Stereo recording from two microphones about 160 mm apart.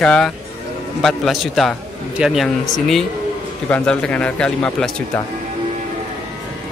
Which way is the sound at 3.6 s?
5° left (ahead or behind).